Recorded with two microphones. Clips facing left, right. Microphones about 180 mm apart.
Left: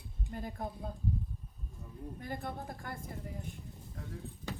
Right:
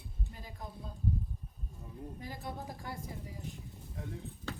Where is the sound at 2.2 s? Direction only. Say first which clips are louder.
Left 3 dB; 55° left (ahead or behind).